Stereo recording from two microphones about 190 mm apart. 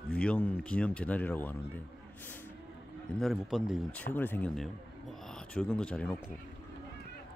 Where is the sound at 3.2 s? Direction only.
Centre (ahead or behind).